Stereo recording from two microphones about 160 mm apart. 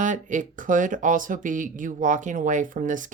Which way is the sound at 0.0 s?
50° right (ahead or behind).